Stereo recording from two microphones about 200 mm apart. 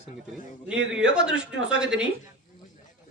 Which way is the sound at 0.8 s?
70° right (ahead or behind).